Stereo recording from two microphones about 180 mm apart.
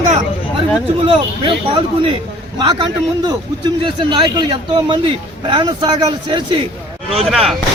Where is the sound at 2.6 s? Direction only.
25° right (ahead or behind).